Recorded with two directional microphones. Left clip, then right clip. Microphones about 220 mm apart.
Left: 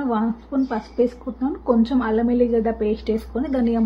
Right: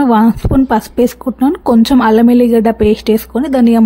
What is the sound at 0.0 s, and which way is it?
Speech, 50° right (ahead or behind).